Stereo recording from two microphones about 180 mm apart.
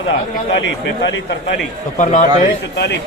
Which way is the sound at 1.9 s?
45° left (ahead or behind).